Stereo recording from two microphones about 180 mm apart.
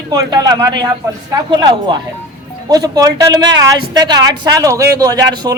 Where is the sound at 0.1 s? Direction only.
20° right (ahead or behind).